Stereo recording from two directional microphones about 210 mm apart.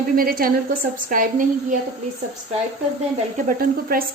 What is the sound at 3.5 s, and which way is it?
Speech, 45° right (ahead or behind).